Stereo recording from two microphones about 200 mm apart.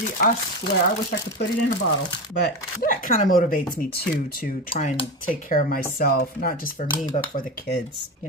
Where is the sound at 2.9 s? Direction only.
40° left (ahead or behind).